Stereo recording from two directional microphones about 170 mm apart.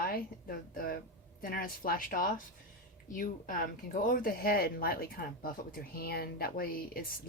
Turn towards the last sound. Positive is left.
turn(degrees=60)  # may be behind; listen again after turning